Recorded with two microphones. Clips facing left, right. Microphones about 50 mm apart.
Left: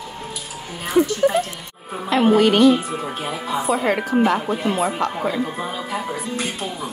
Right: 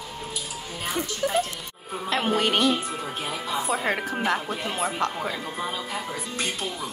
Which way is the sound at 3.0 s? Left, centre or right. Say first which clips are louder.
Left 4 dB; left.